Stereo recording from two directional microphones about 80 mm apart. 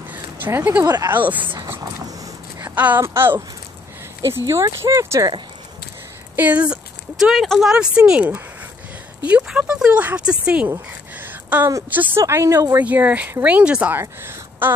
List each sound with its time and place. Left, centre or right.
0.5 s speech: right
0.8 s speech: right
1.1 s speech: right
1.4 s speech: right
2.6 s a sound: right
3.0 s speech: right
4.5 s speech: right
6.3 s speech: right
7.3 s speech: centre
7.6 s speech: centre
11.1 s a sound: right
11.9 s speech: right
12.2 s speech: right